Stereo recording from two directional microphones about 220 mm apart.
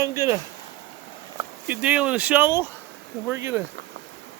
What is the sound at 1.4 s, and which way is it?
Speech, 10° right (ahead or behind).